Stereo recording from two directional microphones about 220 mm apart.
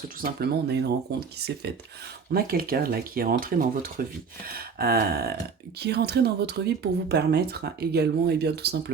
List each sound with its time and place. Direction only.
0.3 s speech: 50° right (ahead or behind)